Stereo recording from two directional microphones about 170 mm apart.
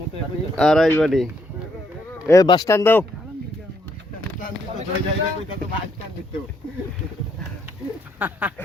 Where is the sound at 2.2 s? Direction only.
20° left (ahead or behind).